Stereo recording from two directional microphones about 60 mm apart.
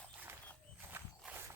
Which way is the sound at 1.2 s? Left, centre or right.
Centre.